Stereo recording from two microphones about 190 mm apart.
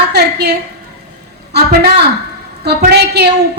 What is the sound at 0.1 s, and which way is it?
Speech, 60° right (ahead or behind).